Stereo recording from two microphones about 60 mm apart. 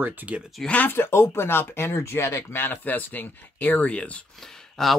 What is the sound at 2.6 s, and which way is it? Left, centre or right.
Speech, left.